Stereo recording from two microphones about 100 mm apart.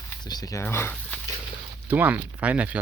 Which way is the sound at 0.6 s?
25° left (ahead or behind).